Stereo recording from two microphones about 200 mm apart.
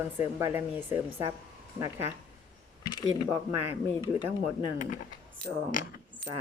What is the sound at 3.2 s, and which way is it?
Speech, 10° right (ahead or behind).